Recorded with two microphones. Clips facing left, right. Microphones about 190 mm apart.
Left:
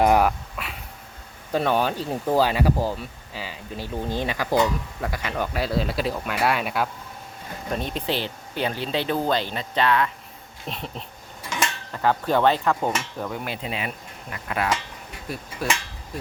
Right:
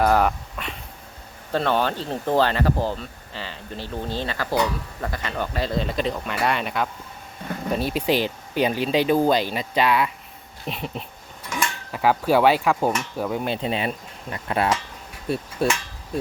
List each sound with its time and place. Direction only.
0.0 s dog: 15° left (ahead or behind)
0.3 s dog: 5° left (ahead or behind)
1.5 s speech: 10° left (ahead or behind)
7.7 s speech: 5° right (ahead or behind)
13.3 s speech: 25° right (ahead or behind)
15.3 s hammer: 30° right (ahead or behind)